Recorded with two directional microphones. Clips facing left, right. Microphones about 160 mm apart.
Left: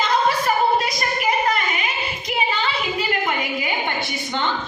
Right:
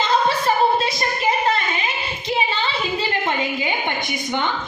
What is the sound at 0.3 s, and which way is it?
Female singing, 25° right (ahead or behind).